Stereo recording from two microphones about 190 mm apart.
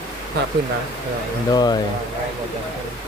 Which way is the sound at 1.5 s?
20° left (ahead or behind).